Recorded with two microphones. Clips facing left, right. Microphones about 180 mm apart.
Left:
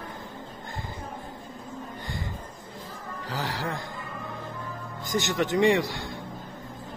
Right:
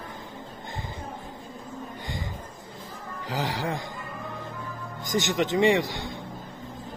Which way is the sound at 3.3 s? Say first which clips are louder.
Right 3 dB; 15° right (ahead or behind).